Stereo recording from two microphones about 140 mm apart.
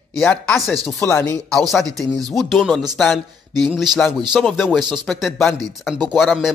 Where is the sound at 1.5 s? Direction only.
Centre (ahead or behind).